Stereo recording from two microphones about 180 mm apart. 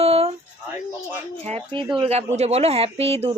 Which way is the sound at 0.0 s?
35° right (ahead or behind).